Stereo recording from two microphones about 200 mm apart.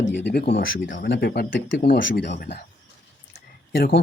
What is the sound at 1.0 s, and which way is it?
Speech, 50° left (ahead or behind).